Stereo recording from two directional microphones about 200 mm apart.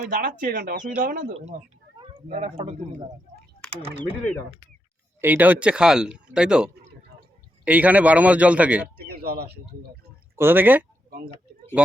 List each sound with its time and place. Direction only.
0.1 s speech: 45° right (ahead or behind)
2.0 s speech: 25° right (ahead or behind)
5.2 s speech: 10° right (ahead or behind)
9.0 s speech: 55° right (ahead or behind)
10.3 s speech: 10° right (ahead or behind)